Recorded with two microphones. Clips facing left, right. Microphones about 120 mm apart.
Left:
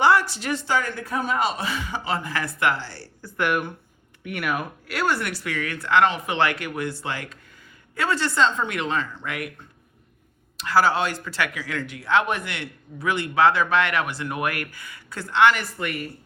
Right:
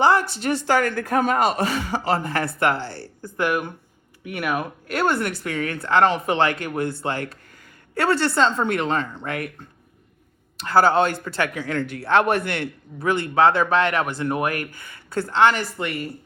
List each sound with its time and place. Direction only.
0.0 s a man's voice: 45° right (ahead or behind); by 2.5 s 30° right (ahead or behind)
2.7 s a man's voice: 55° right (ahead or behind)
3.4 s speech: 15° right (ahead or behind)
5.1 s a man's voice: 50° right (ahead or behind)
5.5 s speech: 25° right (ahead or behind)
5.9 s a man's voice: 40° right (ahead or behind); by 8.4 s 60° right (ahead or behind)
8.4 s speech: 40° right (ahead or behind)
10.7 s a man's voice: 50° right (ahead or behind)
11.6 s speech: 25° right (ahead or behind)
11.9 s a man's voice: 60° right (ahead or behind)
13.1 s a man's voice: 45° right (ahead or behind); by 16.1 s 30° right (ahead or behind)